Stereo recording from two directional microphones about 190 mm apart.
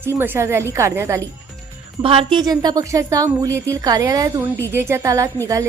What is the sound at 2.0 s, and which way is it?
A woman's voice, 25° right (ahead or behind).